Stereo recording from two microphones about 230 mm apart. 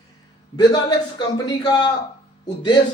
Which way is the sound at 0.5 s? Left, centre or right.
Centre.